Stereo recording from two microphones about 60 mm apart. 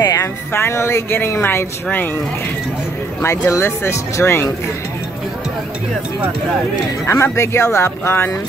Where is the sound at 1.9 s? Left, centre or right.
Left.